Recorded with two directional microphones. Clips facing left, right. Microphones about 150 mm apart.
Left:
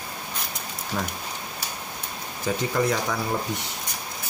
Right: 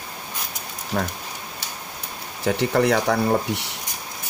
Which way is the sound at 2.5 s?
70° right (ahead or behind).